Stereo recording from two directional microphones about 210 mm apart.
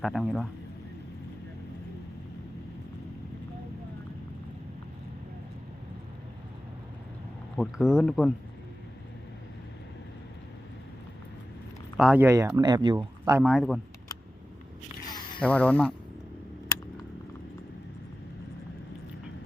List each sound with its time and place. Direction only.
0.0 s speech: centre (ahead or behind)
7.5 s speech: centre (ahead or behind)
11.9 s speech: 5° right (ahead or behind)
13.4 s speech: centre (ahead or behind)
15.0 s a sound: 20° left (ahead or behind)
15.4 s speech: 5° left (ahead or behind)